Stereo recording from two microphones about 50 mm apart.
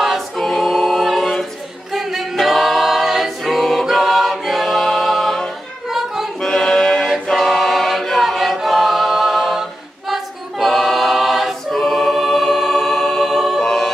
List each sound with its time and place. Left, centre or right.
0.0 s choir: centre
2.0 s a capella: centre
5.9 s a sound: centre
6.4 s music: centre
7.3 s choir: centre
13.7 s a capella: centre